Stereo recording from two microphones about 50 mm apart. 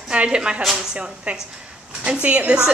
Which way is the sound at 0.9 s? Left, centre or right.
Right.